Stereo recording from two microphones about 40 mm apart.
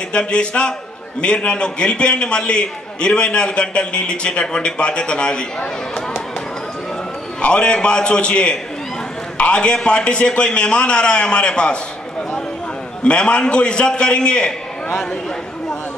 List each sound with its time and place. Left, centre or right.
0.1 s a man's voice: left
7.4 s a man's voice: left
13.0 s a man's voice: left